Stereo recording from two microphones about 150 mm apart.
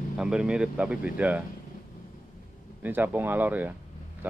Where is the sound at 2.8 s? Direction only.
10° right (ahead or behind).